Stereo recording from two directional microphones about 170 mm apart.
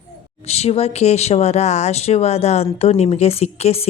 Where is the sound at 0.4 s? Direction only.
40° left (ahead or behind).